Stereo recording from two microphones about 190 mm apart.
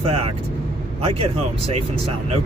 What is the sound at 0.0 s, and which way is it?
Speech, 30° right (ahead or behind).